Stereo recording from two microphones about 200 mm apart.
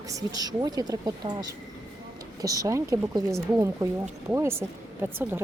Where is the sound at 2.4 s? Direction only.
15° right (ahead or behind).